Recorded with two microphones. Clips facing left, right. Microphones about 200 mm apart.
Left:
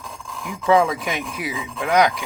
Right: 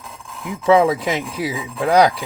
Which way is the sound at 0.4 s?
30° right (ahead or behind).